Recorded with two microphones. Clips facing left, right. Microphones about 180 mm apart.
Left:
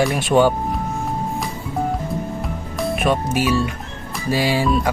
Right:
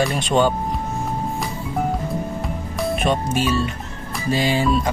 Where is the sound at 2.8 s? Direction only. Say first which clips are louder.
Left 1 dB; 5° left (ahead or behind).